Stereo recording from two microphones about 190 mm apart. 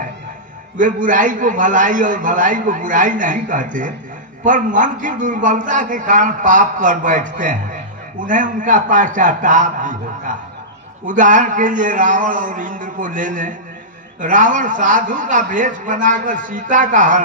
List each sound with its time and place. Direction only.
0.7 s a man's voice: 45° right (ahead or behind)